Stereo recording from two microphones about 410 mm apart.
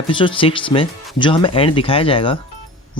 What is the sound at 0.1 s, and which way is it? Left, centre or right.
Speech, centre.